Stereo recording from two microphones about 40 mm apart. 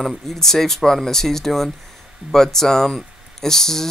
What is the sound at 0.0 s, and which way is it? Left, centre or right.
Speech, centre.